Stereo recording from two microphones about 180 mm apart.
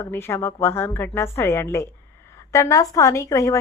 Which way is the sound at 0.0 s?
15° left (ahead or behind).